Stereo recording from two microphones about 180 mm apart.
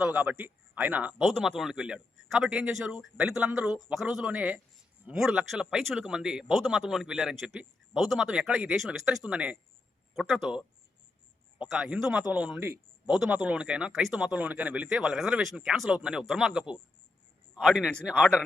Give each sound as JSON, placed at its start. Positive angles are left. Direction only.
{"t": 0.0, "sound": "speech", "side_deg": -10}